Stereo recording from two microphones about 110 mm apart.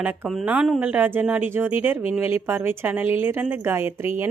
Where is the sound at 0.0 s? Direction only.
15° right (ahead or behind).